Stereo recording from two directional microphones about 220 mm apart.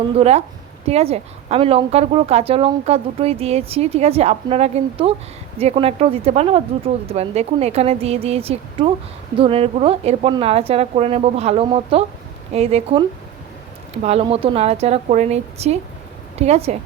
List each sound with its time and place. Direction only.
0.2 s a woman's voice: 30° right (ahead or behind)